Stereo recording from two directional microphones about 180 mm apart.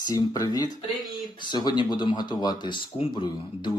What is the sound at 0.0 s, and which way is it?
Speech, 20° left (ahead or behind).